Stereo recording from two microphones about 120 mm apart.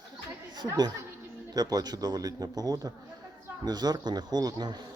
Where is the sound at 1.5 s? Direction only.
35° right (ahead or behind).